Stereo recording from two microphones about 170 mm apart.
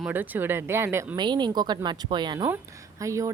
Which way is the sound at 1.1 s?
25° right (ahead or behind).